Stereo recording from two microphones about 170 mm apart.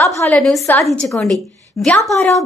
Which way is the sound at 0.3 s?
Centre (ahead or behind).